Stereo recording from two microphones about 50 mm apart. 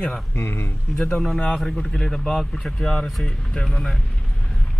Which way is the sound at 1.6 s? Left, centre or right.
Centre.